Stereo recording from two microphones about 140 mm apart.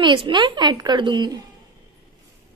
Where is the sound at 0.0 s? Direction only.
35° right (ahead or behind).